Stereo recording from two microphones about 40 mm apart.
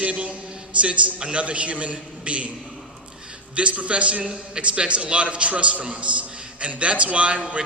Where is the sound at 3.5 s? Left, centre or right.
Right.